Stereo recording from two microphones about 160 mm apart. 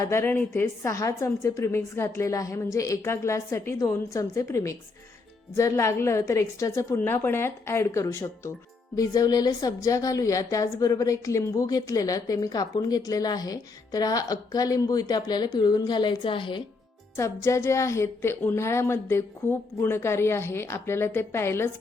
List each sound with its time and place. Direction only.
0.0 s a woman's voice: 15° left (ahead or behind); by 16.6 s 30° left (ahead or behind)
17.2 s a woman's voice: 20° left (ahead or behind)